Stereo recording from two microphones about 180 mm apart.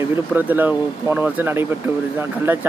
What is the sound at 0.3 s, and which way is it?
A man's voice, 10° right (ahead or behind).